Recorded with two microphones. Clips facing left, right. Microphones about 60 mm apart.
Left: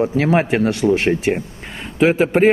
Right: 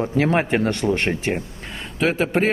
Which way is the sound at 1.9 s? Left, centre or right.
Centre.